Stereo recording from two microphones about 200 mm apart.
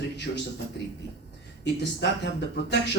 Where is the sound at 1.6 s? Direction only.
60° left (ahead or behind).